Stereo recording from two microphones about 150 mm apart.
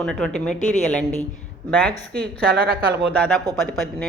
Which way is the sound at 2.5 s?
90° right.